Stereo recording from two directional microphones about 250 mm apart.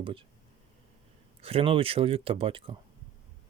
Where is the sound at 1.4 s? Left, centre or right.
Right.